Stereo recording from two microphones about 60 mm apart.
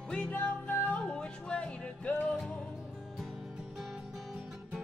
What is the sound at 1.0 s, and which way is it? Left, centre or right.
Music, centre.